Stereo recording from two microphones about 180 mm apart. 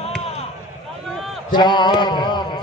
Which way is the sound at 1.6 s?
25° left (ahead or behind).